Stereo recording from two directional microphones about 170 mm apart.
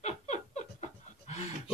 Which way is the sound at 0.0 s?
40° left (ahead or behind).